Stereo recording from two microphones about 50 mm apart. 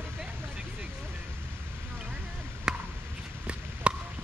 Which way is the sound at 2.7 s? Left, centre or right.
Centre.